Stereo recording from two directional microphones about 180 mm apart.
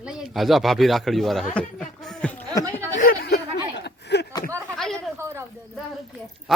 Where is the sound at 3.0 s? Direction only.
55° left (ahead or behind).